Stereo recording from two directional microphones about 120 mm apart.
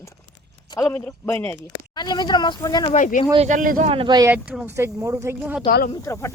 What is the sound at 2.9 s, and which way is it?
Speech, 90° left.